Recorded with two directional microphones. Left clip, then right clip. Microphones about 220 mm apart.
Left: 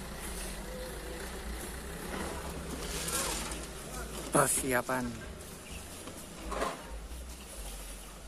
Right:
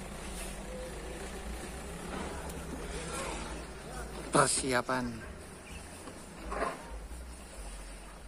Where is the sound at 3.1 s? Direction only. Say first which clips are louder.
Left 3 dB; 40° left (ahead or behind).